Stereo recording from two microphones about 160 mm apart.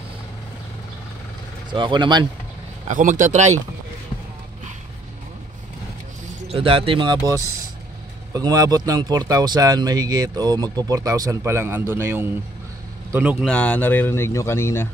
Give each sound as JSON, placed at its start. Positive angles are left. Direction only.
{"t": 1.7, "sound": "a man's voice", "side_deg": -30}
{"t": 2.9, "sound": "speech", "side_deg": -55}
{"t": 6.5, "sound": "a man's voice", "side_deg": -35}
{"t": 13.5, "sound": "speech", "side_deg": 10}